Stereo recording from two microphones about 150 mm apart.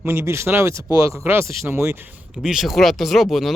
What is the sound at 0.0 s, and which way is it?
Speech, 15° right (ahead or behind).